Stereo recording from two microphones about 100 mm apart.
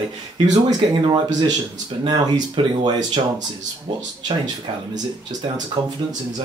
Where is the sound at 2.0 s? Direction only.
45° right (ahead or behind).